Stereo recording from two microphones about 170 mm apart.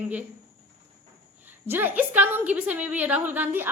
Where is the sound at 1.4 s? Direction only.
10° right (ahead or behind).